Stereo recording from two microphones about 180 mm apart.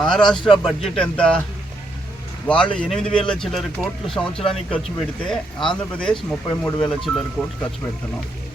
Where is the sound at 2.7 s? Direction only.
5° left (ahead or behind).